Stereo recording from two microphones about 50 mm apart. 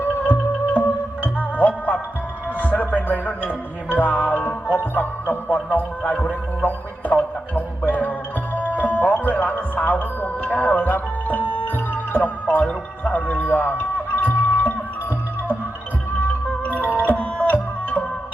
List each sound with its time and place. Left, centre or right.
0.0 s music: left
6.7 s music: left
16.2 s music: left